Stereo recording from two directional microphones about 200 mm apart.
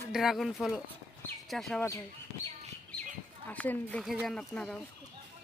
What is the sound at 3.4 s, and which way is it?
Speech, 10° left (ahead or behind).